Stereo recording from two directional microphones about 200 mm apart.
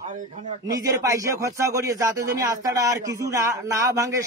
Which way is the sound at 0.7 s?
15° right (ahead or behind).